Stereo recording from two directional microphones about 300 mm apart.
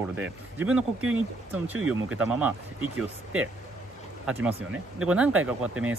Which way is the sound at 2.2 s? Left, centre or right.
Centre.